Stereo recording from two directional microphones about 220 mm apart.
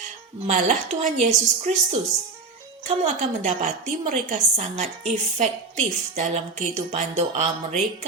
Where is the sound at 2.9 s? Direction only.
35° right (ahead or behind).